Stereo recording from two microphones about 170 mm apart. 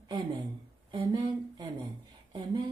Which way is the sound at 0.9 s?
25° right (ahead or behind).